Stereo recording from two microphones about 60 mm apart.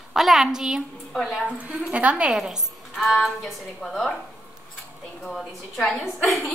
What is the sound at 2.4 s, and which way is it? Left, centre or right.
Speech, centre.